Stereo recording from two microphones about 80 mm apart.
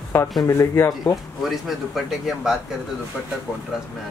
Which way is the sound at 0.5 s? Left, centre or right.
Left.